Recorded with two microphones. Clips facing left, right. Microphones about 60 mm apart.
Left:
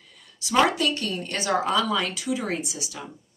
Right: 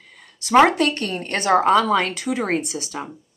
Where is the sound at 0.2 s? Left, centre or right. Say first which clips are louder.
Right 7 dB; right.